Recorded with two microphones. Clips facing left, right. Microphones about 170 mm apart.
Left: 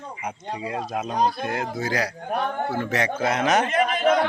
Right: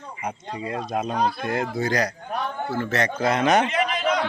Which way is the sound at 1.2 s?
40° left (ahead or behind).